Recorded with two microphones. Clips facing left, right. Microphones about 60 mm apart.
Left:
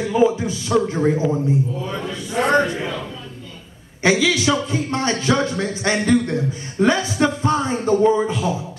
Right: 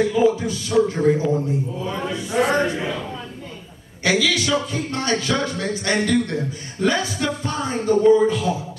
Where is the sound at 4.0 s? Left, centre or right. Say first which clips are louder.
Left 3 dB; left.